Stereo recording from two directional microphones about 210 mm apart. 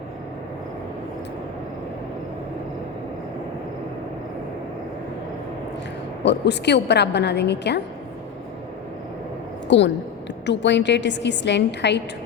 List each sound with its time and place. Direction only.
6.2 s a woman's voice: 55° left (ahead or behind)
9.6 s a woman's voice: 60° left (ahead or behind)